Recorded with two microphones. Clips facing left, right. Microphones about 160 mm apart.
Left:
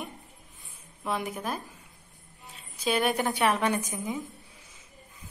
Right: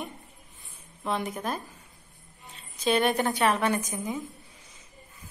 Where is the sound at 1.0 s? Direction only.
5° left (ahead or behind).